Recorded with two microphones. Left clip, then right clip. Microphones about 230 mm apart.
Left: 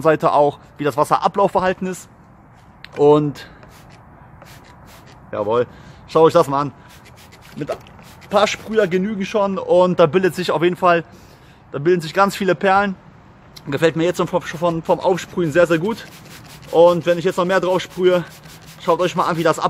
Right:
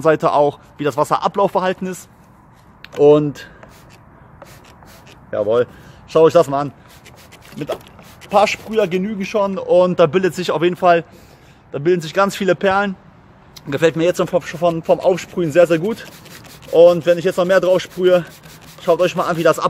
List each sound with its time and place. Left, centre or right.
0.0 s speech: centre
5.3 s speech: centre
7.6 s speech: centre
8.3 s speech: centre